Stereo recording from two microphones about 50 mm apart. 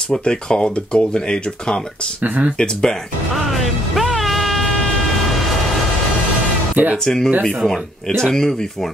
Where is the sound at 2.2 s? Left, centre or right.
Right.